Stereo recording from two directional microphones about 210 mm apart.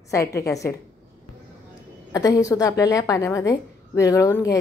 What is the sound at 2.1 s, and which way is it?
A woman's voice, 15° left (ahead or behind).